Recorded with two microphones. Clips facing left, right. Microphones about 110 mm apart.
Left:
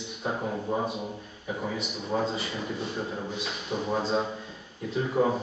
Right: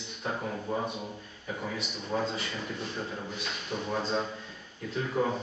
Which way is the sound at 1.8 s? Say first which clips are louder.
Left 2 dB; 5° left (ahead or behind).